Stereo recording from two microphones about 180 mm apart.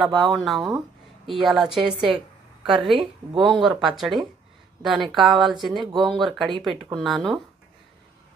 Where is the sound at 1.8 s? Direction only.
30° right (ahead or behind).